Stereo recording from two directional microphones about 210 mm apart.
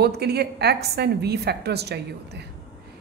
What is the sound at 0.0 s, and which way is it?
Speech, 50° right (ahead or behind).